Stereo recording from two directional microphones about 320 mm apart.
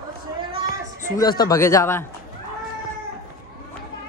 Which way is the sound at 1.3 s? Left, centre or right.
Centre.